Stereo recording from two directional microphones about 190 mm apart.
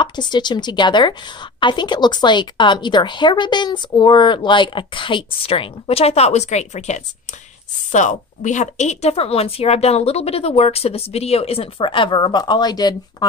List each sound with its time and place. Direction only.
0.0 s a woman's voice: 25° left (ahead or behind)